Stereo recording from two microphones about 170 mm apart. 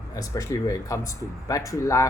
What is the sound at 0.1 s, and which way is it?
Speech, 20° left (ahead or behind).